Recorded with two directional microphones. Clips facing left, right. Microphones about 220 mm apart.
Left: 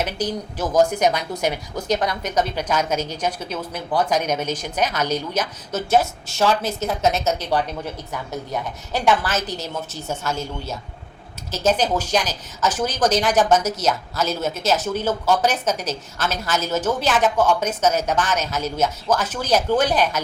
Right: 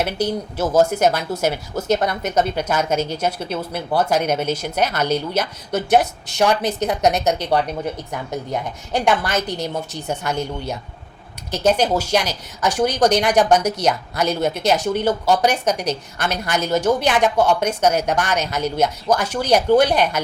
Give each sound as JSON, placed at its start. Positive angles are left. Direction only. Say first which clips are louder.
{"t": 0.0, "sound": "a woman's voice", "louder": "right 3 dB", "side_deg": -10}
{"t": 8.9, "sound": "a woman's voice", "louder": "right 1 dB", "side_deg": -15}